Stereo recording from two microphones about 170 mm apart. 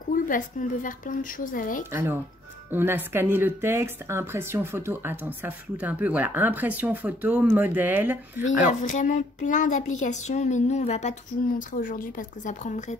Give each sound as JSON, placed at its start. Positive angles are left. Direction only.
{"t": 0.1, "sound": "speech", "side_deg": 50}
{"t": 1.9, "sound": "speech", "side_deg": -15}
{"t": 8.5, "sound": "speech", "side_deg": 50}